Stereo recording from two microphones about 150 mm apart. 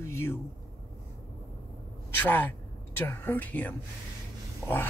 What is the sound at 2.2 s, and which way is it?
Speech, 15° left (ahead or behind).